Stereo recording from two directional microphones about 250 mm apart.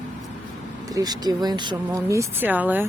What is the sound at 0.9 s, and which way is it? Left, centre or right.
Speech, centre.